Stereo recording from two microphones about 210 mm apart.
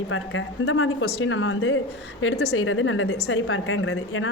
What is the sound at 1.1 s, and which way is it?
A woman's voice, 65° left (ahead or behind).